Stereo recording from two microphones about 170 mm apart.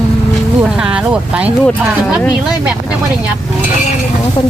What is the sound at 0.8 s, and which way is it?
Speech, 5° right (ahead or behind).